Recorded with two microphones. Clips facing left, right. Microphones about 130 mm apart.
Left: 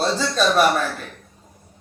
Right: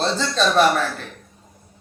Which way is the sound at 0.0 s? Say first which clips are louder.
Left 1 dB; 10° left (ahead or behind).